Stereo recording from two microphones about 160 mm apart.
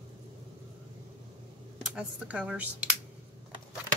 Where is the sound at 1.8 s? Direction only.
5° right (ahead or behind).